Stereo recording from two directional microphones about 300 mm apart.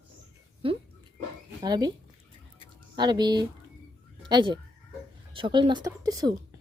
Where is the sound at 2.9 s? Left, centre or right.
Centre.